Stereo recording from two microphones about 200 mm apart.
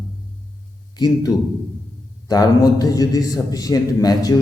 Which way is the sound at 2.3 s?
20° left (ahead or behind).